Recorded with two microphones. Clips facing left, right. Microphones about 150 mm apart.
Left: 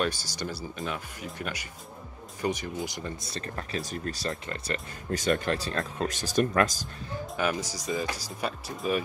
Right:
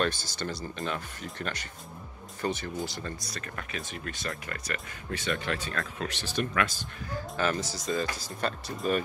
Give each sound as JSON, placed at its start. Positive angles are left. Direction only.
{"t": 0.0, "sound": "speech", "side_deg": 10}
{"t": 3.3, "sound": "speech", "side_deg": 30}
{"t": 4.3, "sound": "speech", "side_deg": 25}
{"t": 5.1, "sound": "speech", "side_deg": 45}
{"t": 7.3, "sound": "speech", "side_deg": 15}